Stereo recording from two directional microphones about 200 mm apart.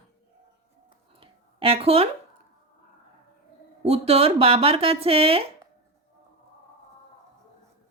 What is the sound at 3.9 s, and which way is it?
Speech, 30° right (ahead or behind).